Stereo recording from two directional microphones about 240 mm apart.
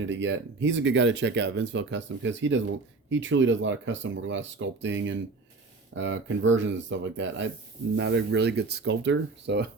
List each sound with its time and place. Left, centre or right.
0.1 s speech: right